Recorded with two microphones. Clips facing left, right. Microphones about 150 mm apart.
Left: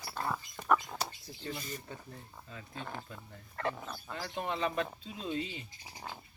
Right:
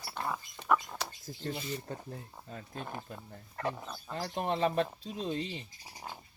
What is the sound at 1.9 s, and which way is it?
Speech, 40° right (ahead or behind).